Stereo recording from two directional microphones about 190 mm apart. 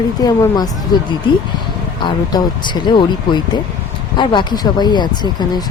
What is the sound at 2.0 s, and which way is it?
Speech, 20° left (ahead or behind).